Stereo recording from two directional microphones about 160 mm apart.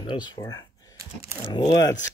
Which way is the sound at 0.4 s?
25° left (ahead or behind).